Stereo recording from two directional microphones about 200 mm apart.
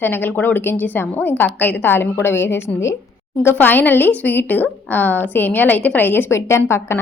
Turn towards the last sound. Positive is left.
turn(degrees=10)  # may be behind; listen again after turning